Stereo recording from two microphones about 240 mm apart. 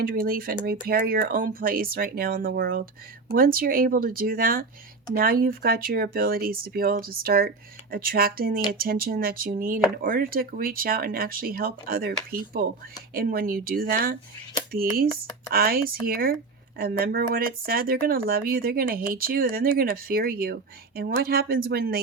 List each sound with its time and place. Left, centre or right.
0.0 s speech: right